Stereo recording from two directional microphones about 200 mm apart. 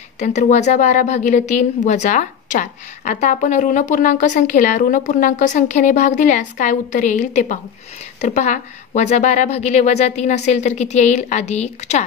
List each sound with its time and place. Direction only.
0.2 s a woman's voice: 35° left (ahead or behind)